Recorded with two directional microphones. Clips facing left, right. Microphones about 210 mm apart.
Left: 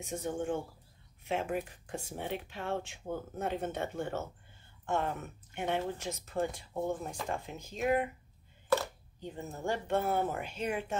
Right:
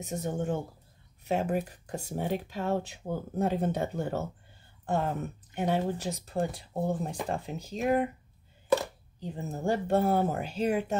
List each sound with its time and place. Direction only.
0.0 s speech: 40° right (ahead or behind)
9.2 s speech: 35° right (ahead or behind)